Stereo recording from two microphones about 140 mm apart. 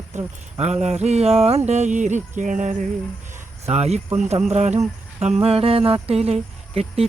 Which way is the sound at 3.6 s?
50° right (ahead or behind).